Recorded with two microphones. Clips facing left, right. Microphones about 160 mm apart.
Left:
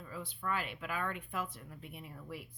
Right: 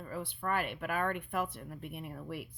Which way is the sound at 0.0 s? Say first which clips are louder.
Right 4 dB; 65° right (ahead or behind).